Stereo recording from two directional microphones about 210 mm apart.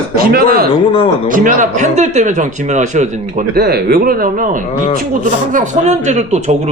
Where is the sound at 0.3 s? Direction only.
45° right (ahead or behind).